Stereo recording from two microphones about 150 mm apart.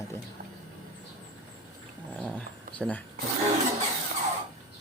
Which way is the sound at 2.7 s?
10° left (ahead or behind).